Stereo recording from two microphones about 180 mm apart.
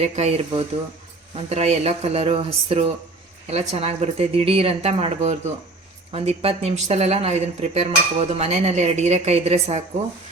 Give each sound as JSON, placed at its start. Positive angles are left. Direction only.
{"t": 0.0, "sound": "speech", "side_deg": -35}